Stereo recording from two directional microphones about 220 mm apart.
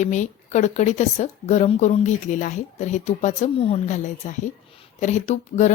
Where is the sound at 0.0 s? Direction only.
35° left (ahead or behind).